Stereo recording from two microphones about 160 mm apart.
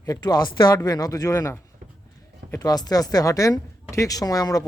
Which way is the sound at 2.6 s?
25° left (ahead or behind).